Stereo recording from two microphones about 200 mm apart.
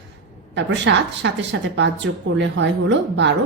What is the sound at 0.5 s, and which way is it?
A woman's voice, 65° right (ahead or behind).